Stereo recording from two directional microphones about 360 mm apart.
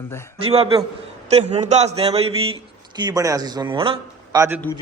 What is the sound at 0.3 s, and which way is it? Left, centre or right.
A man's voice, centre.